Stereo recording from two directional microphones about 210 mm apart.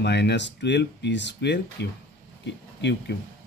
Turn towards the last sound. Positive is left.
turn(degrees=55)  # may be behind; listen again after turning